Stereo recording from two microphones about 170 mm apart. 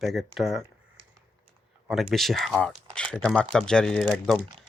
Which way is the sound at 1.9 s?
Centre (ahead or behind).